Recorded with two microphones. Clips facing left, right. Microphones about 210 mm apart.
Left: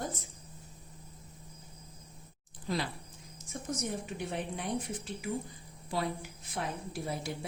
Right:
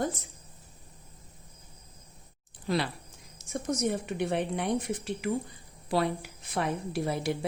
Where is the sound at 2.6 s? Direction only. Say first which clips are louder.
Right 5 dB; 70° right (ahead or behind).